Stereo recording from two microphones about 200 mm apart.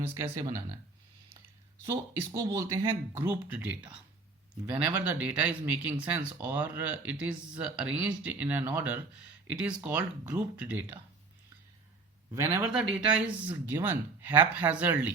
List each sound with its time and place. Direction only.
0.3 s speech: 15° right (ahead or behind)
2.3 s speech: 15° right (ahead or behind)
12.3 s speech: 10° right (ahead or behind)